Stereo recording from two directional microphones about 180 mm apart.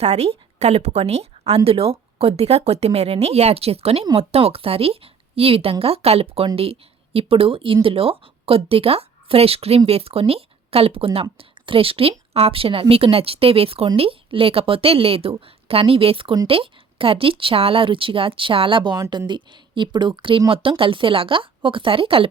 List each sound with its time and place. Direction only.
0.0 s speech: 35° right (ahead or behind)